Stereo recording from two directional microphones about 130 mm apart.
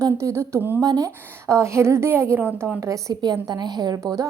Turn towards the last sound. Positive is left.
turn(degrees=-25)  # may be behind; listen again after turning